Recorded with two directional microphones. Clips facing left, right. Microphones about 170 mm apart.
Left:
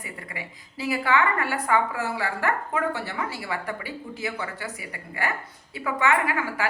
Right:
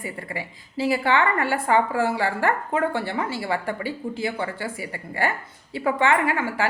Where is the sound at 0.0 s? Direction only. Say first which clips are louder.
Right 6 dB; 30° right (ahead or behind).